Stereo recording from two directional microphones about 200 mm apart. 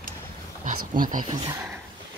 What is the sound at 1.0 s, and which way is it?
Speech, 40° right (ahead or behind).